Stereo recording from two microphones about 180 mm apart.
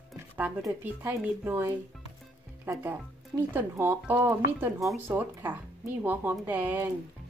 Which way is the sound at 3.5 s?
10° right (ahead or behind).